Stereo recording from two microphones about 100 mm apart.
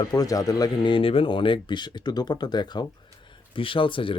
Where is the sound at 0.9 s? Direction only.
65° left (ahead or behind); by 2.8 s 45° left (ahead or behind).